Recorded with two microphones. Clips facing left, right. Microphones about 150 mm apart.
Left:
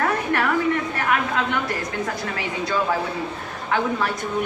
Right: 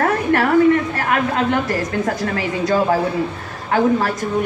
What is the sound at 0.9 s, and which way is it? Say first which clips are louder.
A woman's voice: right 4 dB; 40° right (ahead or behind).